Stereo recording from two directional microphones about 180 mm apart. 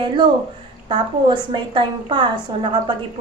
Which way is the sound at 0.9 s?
25° right (ahead or behind).